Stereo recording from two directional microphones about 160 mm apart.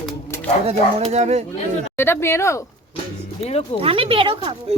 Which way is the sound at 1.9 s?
15° left (ahead or behind).